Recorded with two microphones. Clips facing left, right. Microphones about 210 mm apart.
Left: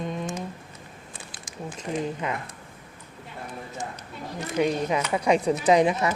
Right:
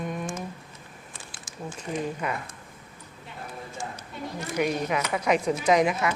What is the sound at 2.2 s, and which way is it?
Speech, 20° left (ahead or behind).